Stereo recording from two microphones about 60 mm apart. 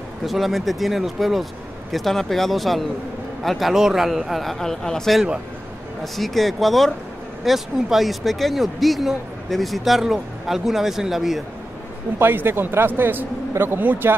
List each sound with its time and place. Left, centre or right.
0.2 s speech: centre
12.2 s speech: right